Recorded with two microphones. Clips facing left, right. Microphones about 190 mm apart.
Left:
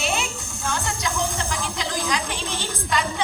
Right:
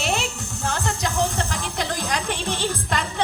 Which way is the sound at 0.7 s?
65° right (ahead or behind).